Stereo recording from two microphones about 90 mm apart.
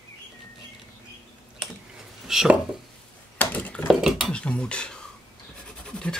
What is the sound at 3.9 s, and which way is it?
Cutlery, 5° right (ahead or behind).